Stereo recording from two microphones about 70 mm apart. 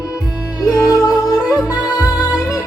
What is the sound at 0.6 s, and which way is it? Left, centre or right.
Music, left.